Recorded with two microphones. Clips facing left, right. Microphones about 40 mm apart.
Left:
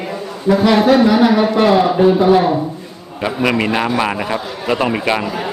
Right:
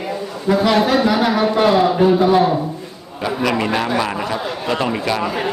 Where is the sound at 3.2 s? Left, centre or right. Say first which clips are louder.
Left 2 dB; left.